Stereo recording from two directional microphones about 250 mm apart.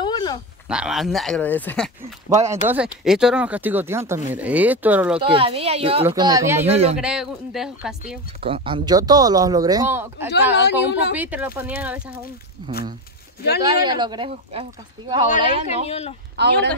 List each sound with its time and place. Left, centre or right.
0.0 s a sound: centre
0.7 s speech: centre
2.5 s speech: centre
5.2 s a woman's voice: right
6.7 s a woman's voice: right
7.0 s speech: centre
8.4 s speech: right
10.5 s speech: left
11.1 s speech: centre
13.6 s a woman's voice: centre
15.9 s speech: left
16.3 s speech: right